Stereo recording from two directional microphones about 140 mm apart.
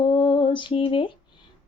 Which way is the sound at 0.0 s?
35° left (ahead or behind).